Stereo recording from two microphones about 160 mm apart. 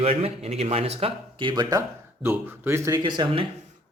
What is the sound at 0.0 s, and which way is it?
Speech, 40° right (ahead or behind).